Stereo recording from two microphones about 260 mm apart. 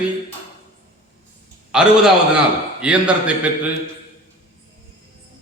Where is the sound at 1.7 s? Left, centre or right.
Centre.